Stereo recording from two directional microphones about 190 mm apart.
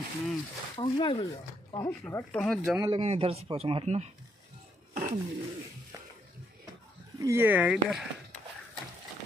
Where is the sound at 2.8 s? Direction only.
25° right (ahead or behind).